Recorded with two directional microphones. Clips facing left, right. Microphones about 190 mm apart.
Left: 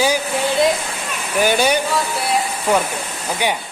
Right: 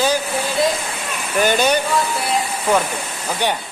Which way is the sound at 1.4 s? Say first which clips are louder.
Even; 10° left (ahead or behind).